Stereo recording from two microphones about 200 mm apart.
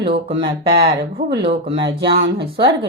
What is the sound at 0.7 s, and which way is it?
Speech, 55° right (ahead or behind).